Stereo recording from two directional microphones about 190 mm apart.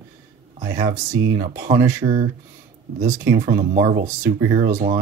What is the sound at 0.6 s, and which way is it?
Speech, 20° right (ahead or behind).